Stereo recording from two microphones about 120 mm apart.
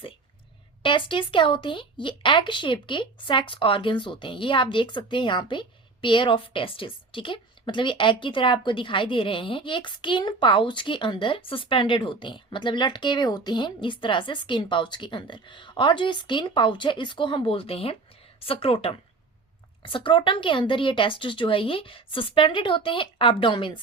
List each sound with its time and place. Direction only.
0.8 s speech: 45° left (ahead or behind)